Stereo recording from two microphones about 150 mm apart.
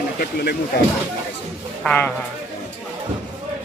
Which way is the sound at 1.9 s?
10° left (ahead or behind).